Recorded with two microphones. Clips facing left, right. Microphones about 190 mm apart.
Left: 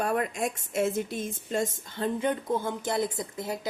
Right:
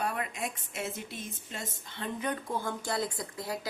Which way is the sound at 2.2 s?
20° left (ahead or behind).